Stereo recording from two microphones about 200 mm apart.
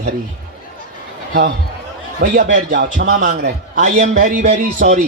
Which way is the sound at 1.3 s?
55° right (ahead or behind).